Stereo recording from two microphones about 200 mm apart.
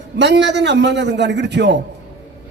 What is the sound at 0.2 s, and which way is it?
A man's voice, 60° right (ahead or behind).